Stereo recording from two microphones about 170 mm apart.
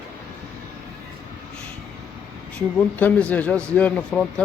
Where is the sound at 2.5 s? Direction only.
10° left (ahead or behind).